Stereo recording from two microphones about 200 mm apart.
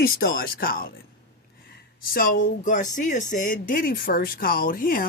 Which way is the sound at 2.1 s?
45° left (ahead or behind).